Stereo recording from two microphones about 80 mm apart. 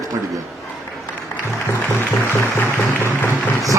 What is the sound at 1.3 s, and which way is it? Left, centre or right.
Music, left.